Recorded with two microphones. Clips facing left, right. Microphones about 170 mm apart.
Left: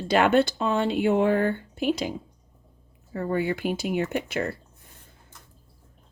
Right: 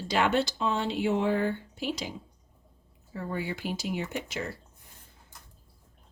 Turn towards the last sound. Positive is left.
turn(degrees=60)  # may be behind; listen again after turning